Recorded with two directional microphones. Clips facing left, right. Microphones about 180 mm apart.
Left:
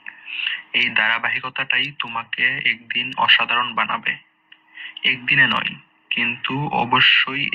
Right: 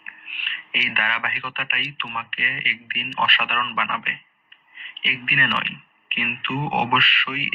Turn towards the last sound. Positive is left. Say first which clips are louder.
# left 2 dB
turn(degrees=40)  # may be behind; listen again after turning